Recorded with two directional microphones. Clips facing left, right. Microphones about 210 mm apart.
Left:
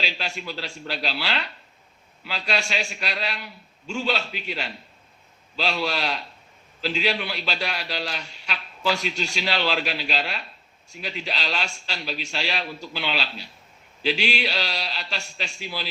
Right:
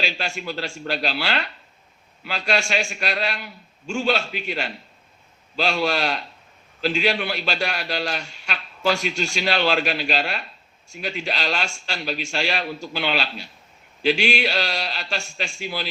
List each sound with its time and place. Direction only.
0.0 s a man's voice: 50° right (ahead or behind)